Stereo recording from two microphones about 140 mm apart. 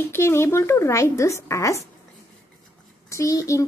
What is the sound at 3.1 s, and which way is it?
Speech, 20° left (ahead or behind).